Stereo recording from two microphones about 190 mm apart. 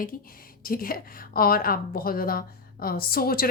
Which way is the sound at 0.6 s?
50° left (ahead or behind).